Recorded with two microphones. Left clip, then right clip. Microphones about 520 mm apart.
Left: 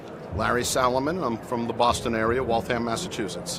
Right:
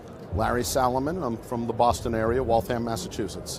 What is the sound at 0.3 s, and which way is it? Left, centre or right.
Speech, right.